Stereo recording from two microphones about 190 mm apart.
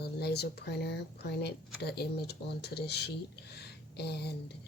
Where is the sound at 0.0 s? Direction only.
60° left (ahead or behind).